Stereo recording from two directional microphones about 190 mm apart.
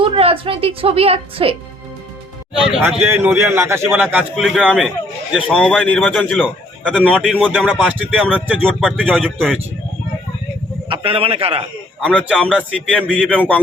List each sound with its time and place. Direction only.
0.0 s a woman's voice: 30° right (ahead or behind)
2.8 s a man's voice: 10° right (ahead or behind); by 7.0 s 5° left (ahead or behind)
7.0 s a man's voice: 5° right (ahead or behind)
10.8 s a man's voice: 25° right (ahead or behind)
11.9 s a man's voice: centre (ahead or behind)